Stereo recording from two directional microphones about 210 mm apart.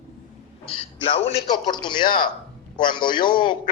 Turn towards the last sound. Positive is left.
turn(degrees=20)  # may be behind; listen again after turning